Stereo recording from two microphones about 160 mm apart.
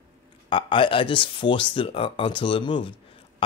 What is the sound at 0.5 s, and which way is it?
Speech, 30° left (ahead or behind).